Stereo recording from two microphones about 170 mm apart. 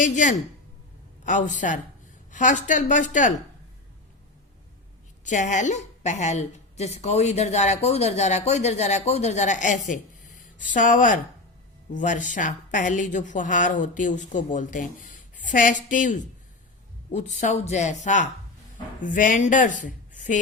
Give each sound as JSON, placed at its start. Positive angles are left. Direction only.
{"t": 0.0, "sound": "a woman's voice", "side_deg": 45}
{"t": 5.2, "sound": "a woman's voice", "side_deg": 45}